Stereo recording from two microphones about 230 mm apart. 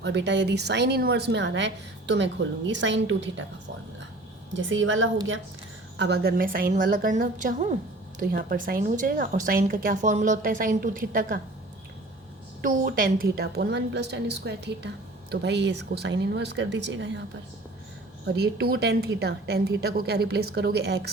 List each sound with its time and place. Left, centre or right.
0.0 s a woman's voice: right
4.5 s a woman's voice: right
6.0 s speech: right
12.6 s a woman's voice: right
18.3 s a woman's voice: right